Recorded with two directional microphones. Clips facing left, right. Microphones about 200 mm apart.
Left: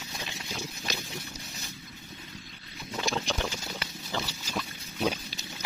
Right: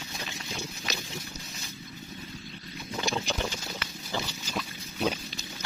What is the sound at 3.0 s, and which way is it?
Patter, centre (ahead or behind).